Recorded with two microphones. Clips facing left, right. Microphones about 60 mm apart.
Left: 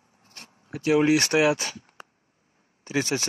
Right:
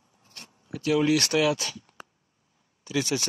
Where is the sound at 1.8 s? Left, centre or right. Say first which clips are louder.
Even; left.